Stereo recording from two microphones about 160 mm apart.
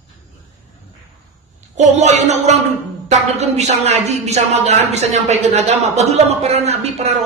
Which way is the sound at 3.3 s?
45° right (ahead or behind).